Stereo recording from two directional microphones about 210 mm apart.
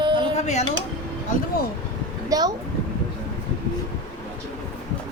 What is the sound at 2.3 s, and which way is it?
Speech, 20° right (ahead or behind).